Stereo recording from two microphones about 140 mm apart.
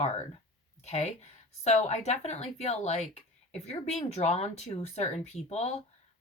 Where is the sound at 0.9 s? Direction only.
50° left (ahead or behind).